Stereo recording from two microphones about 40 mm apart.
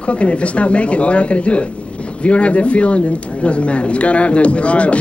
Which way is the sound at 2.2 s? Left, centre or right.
Left.